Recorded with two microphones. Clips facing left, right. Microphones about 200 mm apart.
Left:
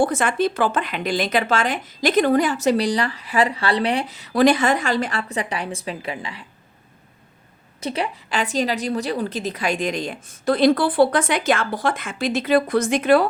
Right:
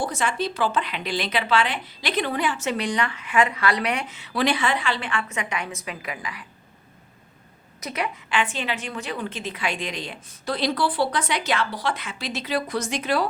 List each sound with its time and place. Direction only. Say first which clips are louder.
0.0 s speech: left 7 dB; 55° left (ahead or behind); by 6.4 s 30° left (ahead or behind)
7.8 s a woman's voice: left 4 dB; 30° left (ahead or behind); by 13.2 s 55° left (ahead or behind)